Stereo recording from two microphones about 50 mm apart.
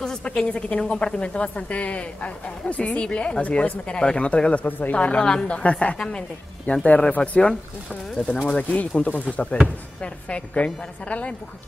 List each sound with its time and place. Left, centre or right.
0.2 s a woman's voice: centre
5.2 s a woman's voice: centre
5.6 s a woman's voice: left